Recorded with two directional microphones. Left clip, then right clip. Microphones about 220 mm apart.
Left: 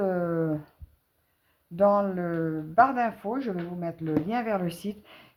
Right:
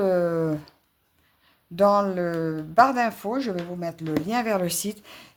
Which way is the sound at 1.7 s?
40° right (ahead or behind).